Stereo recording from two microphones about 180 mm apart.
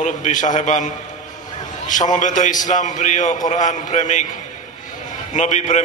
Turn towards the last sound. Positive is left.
turn(degrees=40)  # may be behind; listen again after turning